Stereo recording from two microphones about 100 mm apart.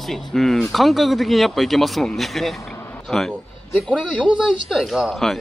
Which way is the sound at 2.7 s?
15° left (ahead or behind).